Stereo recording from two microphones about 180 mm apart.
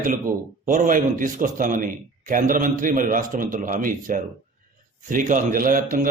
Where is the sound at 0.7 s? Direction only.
45° right (ahead or behind).